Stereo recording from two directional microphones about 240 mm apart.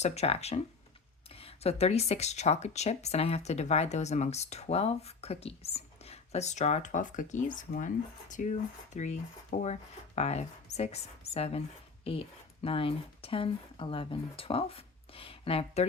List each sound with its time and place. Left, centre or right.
0.0 s speech: left